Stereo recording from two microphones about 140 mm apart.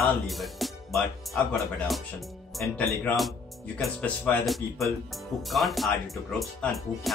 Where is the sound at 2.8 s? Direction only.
20° left (ahead or behind).